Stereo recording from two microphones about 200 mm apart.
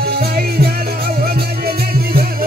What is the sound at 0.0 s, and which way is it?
Music, 50° right (ahead or behind).